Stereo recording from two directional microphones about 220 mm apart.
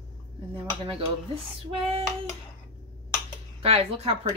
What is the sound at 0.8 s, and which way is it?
Speech, 25° right (ahead or behind).